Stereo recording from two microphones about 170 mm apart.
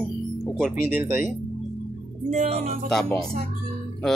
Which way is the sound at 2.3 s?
40° right (ahead or behind).